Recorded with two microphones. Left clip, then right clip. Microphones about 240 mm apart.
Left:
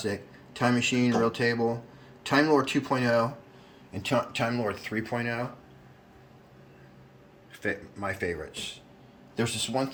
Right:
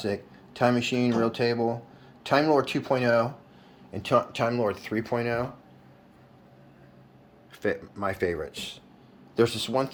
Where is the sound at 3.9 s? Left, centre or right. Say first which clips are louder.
Right 4 dB; centre.